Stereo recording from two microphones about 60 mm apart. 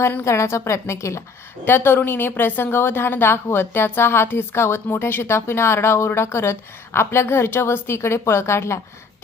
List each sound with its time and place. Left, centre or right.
0.3 s a woman's voice: left
1.6 s a woman's voice: left